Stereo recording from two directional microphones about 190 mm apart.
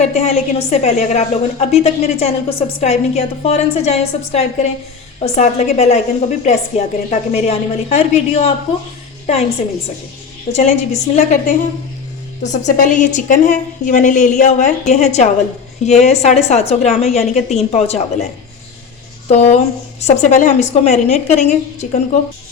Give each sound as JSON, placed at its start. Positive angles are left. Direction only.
{"t": 0.0, "sound": "a woman's voice", "side_deg": 35}
{"t": 10.5, "sound": "a woman's voice", "side_deg": 35}
{"t": 19.3, "sound": "a woman's voice", "side_deg": 35}